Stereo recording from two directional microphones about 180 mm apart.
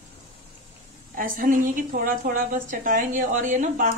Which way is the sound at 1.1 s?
50° right (ahead or behind).